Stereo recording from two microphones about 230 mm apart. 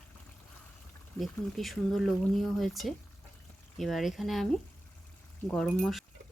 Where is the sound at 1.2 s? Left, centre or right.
Centre.